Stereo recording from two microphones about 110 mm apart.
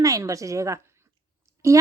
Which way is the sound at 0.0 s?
30° right (ahead or behind).